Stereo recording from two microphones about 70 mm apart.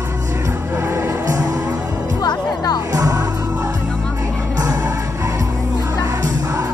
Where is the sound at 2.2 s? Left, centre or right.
Left.